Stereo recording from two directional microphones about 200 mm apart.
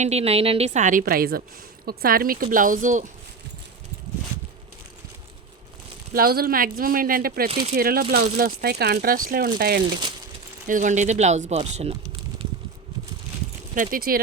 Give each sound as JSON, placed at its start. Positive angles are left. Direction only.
{"t": 0.0, "sound": "a woman's voice", "side_deg": -30}
{"t": 6.1, "sound": "speech", "side_deg": -50}
{"t": 7.5, "sound": "speech", "side_deg": -25}
{"t": 7.8, "sound": "speech", "side_deg": -50}
{"t": 9.9, "sound": "speech", "side_deg": -25}
{"t": 10.7, "sound": "a woman's voice", "side_deg": -40}
{"t": 13.7, "sound": "speech", "side_deg": -45}